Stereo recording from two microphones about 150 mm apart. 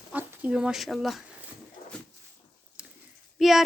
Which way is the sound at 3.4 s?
Centre (ahead or behind).